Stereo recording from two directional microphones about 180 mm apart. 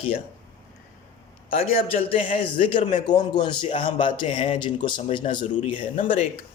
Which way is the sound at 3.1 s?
25° left (ahead or behind).